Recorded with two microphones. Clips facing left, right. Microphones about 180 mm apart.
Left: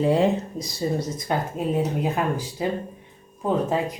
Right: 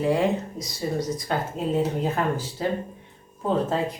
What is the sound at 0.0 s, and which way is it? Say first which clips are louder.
Speech: left 2 dB; 25° left (ahead or behind).